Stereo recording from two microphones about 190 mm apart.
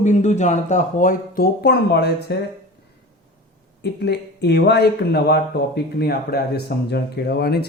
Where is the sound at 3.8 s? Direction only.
60° left (ahead or behind).